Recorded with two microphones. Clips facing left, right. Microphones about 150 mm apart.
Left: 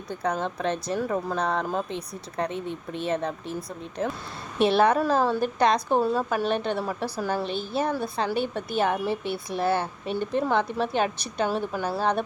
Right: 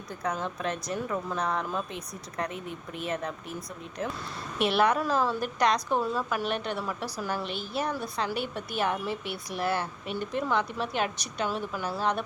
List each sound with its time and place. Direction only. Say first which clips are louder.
0.1 s a woman's voice: left 4 dB; 30° left (ahead or behind)